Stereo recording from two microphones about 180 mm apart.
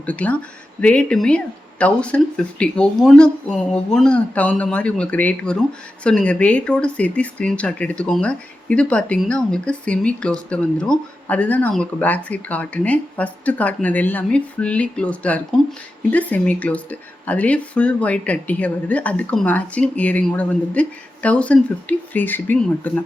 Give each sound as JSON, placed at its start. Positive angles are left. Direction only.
{"t": 0.0, "sound": "speech", "side_deg": 10}